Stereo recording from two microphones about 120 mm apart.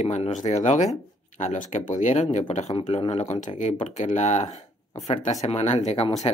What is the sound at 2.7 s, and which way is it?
Speech, 50° left (ahead or behind).